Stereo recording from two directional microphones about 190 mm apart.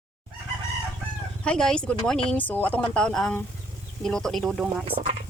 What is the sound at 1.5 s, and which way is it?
Speech, 5° left (ahead or behind).